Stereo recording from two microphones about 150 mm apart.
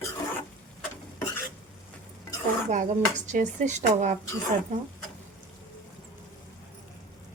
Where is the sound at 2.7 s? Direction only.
55° right (ahead or behind).